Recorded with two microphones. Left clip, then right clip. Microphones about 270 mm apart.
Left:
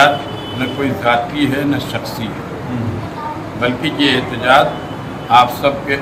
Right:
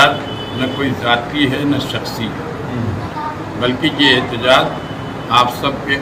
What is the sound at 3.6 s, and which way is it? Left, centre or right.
A man's voice, centre.